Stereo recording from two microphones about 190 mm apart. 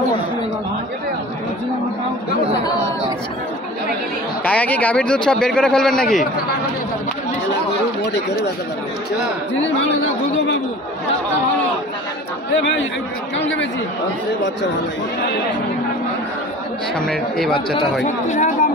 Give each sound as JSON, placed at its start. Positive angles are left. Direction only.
{"t": 4.5, "sound": "speech", "side_deg": 5}
{"t": 17.0, "sound": "speech", "side_deg": 5}
{"t": 18.0, "sound": "speech", "side_deg": 40}